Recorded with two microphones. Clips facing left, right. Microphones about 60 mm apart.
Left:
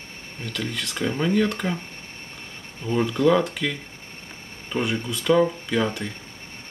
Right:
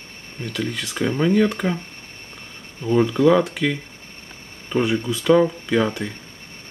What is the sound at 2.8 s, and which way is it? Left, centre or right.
Speech, centre.